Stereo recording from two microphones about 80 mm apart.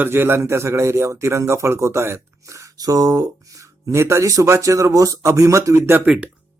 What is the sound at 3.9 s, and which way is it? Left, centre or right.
Speech, right.